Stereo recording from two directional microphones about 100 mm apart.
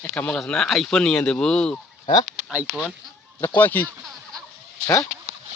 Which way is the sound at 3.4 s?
20° left (ahead or behind).